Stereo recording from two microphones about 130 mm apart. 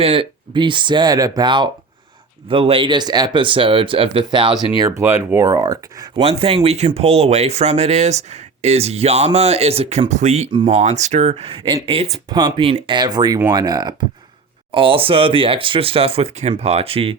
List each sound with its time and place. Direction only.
0.0 s speech: 45° right (ahead or behind)
4.8 s speech: 20° right (ahead or behind)
6.2 s speech: 45° right (ahead or behind)
10.1 s speech: 65° right (ahead or behind); by 12.0 s 45° right (ahead or behind)
12.3 s speech: 30° right (ahead or behind)
12.6 s speech: 45° right (ahead or behind)
13.0 s speech: 35° right (ahead or behind)
14.7 s speech: 45° right (ahead or behind)